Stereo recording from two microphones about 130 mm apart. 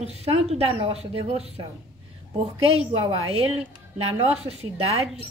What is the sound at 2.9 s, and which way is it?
A woman's voice, 45° right (ahead or behind).